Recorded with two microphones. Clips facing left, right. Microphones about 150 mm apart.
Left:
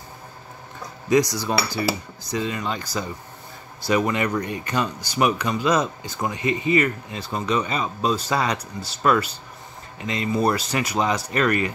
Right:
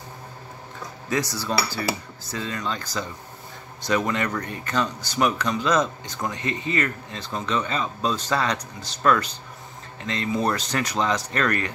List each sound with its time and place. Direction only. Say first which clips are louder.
1.1 s speech: left 6 dB; 15° left (ahead or behind)